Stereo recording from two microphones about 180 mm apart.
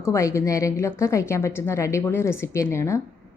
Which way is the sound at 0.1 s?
15° left (ahead or behind).